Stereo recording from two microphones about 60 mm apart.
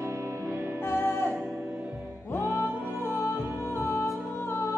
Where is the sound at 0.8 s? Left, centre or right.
Left.